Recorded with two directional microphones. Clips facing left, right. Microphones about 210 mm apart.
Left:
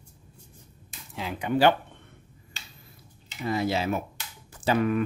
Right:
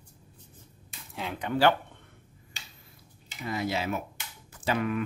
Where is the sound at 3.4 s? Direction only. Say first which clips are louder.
Left 4 dB; 30° left (ahead or behind).